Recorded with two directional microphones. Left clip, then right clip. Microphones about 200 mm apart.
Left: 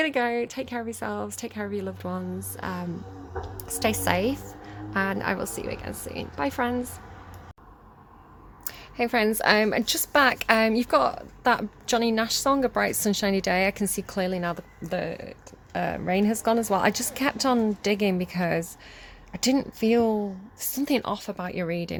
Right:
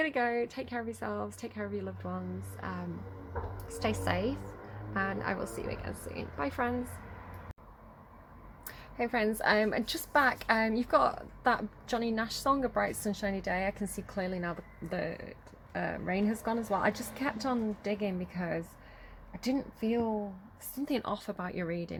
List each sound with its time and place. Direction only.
0.0 s a woman's voice: 25° left (ahead or behind)
8.6 s a woman's voice: 25° left (ahead or behind)
20.8 s a woman's voice: 25° left (ahead or behind)